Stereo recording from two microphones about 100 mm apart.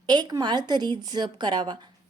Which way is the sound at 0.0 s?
45° right (ahead or behind).